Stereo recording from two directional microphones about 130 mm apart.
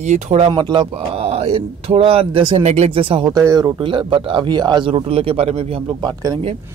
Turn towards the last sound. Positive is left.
turn(degrees=-30)  # may be behind; listen again after turning